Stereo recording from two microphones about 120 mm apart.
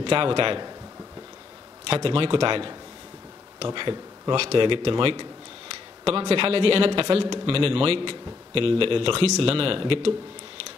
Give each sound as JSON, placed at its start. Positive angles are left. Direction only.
{"t": 0.0, "sound": "speech", "side_deg": -45}
{"t": 1.9, "sound": "speech", "side_deg": -45}